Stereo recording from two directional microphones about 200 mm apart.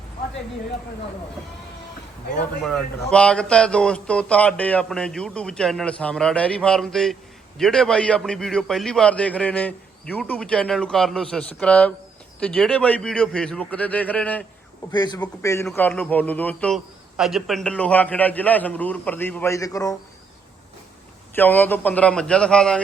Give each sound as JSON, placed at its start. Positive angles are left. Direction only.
{"t": 2.4, "sound": "a man's voice", "side_deg": 5}
{"t": 14.9, "sound": "a man's voice", "side_deg": 20}
{"t": 21.3, "sound": "a man's voice", "side_deg": 10}